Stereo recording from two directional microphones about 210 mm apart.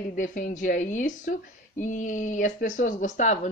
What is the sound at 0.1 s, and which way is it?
Speech, 40° left (ahead or behind).